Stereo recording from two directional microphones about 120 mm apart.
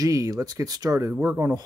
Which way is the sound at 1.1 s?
20° right (ahead or behind).